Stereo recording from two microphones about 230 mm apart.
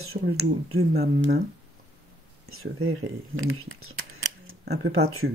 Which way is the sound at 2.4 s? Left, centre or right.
Right.